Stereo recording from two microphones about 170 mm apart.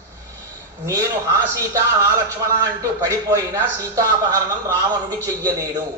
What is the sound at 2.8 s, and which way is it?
Speech, 20° right (ahead or behind).